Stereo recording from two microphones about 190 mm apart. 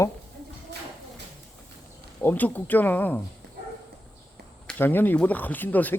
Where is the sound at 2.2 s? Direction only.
10° left (ahead or behind).